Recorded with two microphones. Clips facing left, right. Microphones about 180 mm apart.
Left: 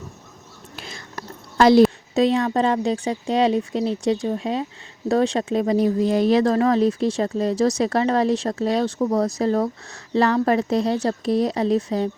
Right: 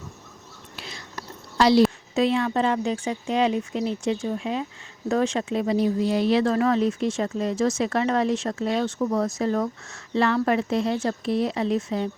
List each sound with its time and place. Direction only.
0.8 s speech: 50° left (ahead or behind)